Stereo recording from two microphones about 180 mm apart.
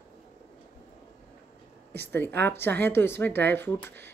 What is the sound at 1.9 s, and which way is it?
Speech, 10° left (ahead or behind).